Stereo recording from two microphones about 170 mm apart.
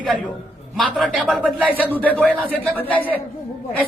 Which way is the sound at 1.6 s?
10° left (ahead or behind).